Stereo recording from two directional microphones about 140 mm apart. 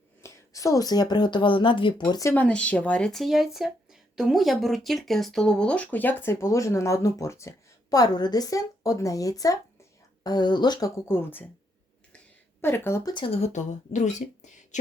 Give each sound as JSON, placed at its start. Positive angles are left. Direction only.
{"t": 0.2, "sound": "a woman's voice", "side_deg": 25}
{"t": 2.3, "sound": "speech", "side_deg": 10}
{"t": 12.6, "sound": "speech", "side_deg": 15}
{"t": 13.1, "sound": "speech", "side_deg": 40}